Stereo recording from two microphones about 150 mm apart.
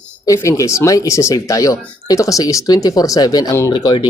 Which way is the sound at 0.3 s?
20° left (ahead or behind).